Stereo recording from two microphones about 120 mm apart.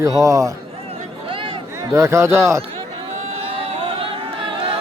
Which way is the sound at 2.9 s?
60° right (ahead or behind).